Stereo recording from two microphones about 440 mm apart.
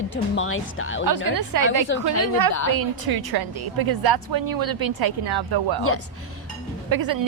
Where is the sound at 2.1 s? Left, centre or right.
Left.